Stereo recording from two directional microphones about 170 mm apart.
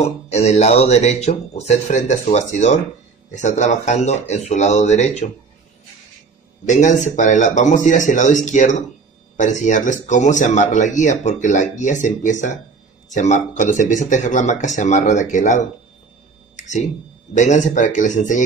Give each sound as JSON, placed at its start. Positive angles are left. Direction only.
{"t": 0.0, "sound": "speech", "side_deg": 40}
{"t": 6.6, "sound": "speech", "side_deg": 45}
{"t": 16.5, "sound": "a sound", "side_deg": 45}
{"t": 17.3, "sound": "speech", "side_deg": 45}